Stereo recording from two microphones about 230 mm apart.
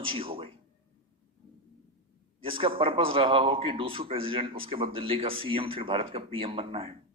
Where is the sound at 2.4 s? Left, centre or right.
Right.